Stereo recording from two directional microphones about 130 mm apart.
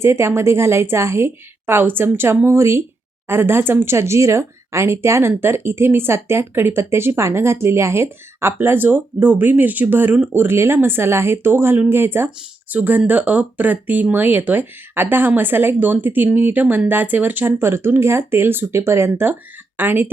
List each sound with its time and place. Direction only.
0.0 s a woman's voice: 20° right (ahead or behind)